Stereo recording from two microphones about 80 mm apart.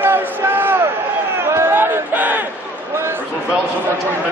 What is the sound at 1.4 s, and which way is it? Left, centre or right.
Crowd, right.